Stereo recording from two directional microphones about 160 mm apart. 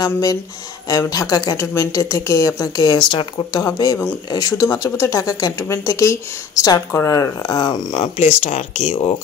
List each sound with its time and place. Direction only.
0.0 s speech: 20° left (ahead or behind)
3.6 s speech: 20° left (ahead or behind); by 9.1 s 40° left (ahead or behind)